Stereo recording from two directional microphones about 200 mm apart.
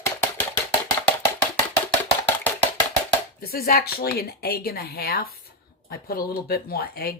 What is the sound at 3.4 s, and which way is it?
Speech, 50° left (ahead or behind).